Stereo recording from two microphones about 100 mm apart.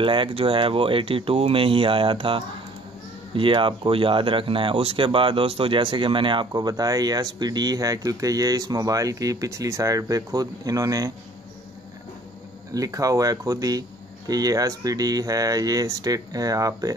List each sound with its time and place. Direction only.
0.0 s speech: 60° right (ahead or behind); by 11.1 s 35° right (ahead or behind)
12.7 s speech: 35° right (ahead or behind)